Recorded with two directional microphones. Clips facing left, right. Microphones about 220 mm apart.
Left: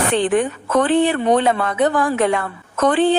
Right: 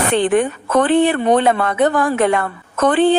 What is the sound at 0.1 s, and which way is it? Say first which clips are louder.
A woman's voice: right 4 dB; 55° right (ahead or behind).